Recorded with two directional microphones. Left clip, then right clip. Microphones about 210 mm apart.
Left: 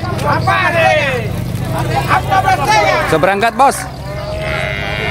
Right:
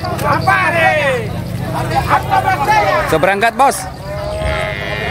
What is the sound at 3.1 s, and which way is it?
Speech, 5° left (ahead or behind).